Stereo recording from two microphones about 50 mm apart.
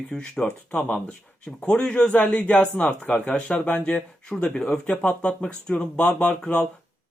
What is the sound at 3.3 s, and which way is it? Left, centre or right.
Speech, centre.